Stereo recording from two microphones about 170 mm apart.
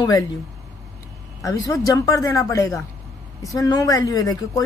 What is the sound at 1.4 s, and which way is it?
A woman's voice, 20° left (ahead or behind).